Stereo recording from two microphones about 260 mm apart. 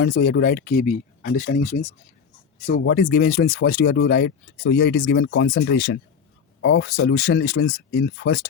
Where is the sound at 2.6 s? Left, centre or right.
Left.